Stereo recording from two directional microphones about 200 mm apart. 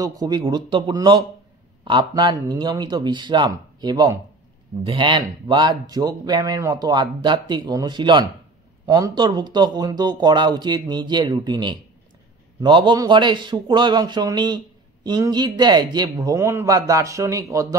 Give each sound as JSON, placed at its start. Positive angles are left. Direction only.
{"t": 0.0, "sound": "speech", "side_deg": -20}